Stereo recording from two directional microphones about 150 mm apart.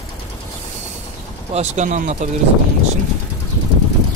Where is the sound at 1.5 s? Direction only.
50° right (ahead or behind).